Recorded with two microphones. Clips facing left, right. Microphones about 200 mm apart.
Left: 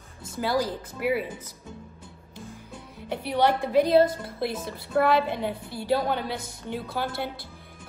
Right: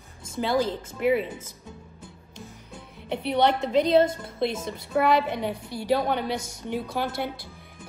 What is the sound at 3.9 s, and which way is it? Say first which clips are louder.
A woman's voice: even; 20° right (ahead or behind).